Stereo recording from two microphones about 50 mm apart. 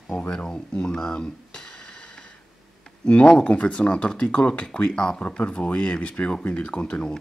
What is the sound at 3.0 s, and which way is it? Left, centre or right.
Speech, left.